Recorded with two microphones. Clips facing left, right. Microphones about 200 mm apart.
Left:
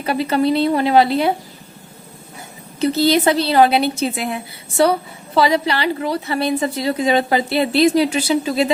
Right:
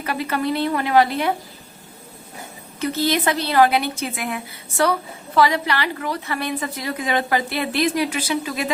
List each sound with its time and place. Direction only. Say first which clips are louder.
0.0 s a woman's voice: left 6 dB; 30° left (ahead or behind)
2.8 s a woman's voice: left 6 dB; 30° left (ahead or behind)